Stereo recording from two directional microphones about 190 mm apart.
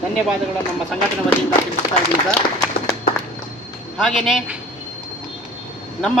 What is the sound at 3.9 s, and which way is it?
Speech, centre (ahead or behind).